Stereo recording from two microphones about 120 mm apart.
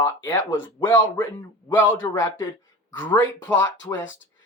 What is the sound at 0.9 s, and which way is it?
A man's voice, 15° left (ahead or behind).